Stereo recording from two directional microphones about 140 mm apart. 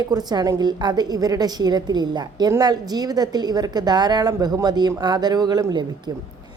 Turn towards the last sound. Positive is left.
turn(degrees=-30)  # may be behind; listen again after turning